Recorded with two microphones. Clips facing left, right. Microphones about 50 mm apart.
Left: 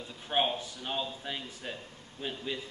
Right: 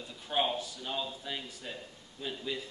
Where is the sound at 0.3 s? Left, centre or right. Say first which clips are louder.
Left 1 dB; left.